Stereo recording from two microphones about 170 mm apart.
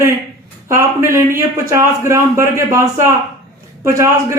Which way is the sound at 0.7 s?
15° right (ahead or behind).